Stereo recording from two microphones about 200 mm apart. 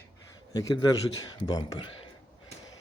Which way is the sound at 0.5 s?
20° left (ahead or behind).